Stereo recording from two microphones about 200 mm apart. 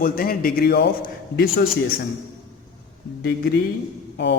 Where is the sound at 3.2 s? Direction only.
55° left (ahead or behind).